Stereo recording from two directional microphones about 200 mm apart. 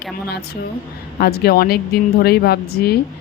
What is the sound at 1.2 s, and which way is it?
A woman's voice, 50° left (ahead or behind).